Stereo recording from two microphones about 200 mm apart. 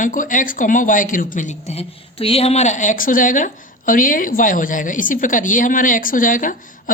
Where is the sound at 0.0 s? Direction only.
40° left (ahead or behind).